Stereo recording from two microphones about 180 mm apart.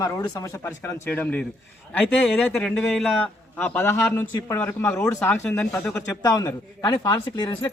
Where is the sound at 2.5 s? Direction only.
5° left (ahead or behind).